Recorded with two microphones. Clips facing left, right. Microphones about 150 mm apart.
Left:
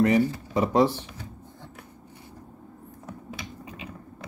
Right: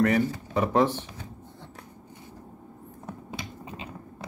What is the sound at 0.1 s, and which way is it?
Speech, 10° left (ahead or behind).